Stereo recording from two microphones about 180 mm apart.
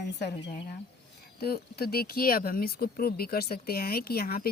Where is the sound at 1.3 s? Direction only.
60° left (ahead or behind).